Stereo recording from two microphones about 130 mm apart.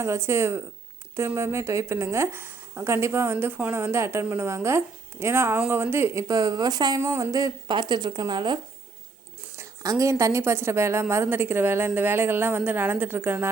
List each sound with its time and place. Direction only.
0.0 s speech: 20° right (ahead or behind)
9.6 s a woman's voice: 25° right (ahead or behind)